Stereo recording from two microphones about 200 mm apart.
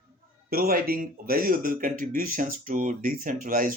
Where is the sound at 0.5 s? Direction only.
45° right (ahead or behind).